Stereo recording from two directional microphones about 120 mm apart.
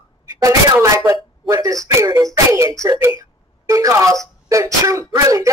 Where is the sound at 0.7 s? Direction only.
20° right (ahead or behind).